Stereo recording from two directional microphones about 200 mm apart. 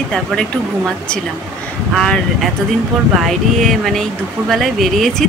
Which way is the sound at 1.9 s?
Centre (ahead or behind).